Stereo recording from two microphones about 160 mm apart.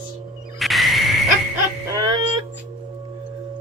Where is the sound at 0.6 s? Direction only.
Centre (ahead or behind).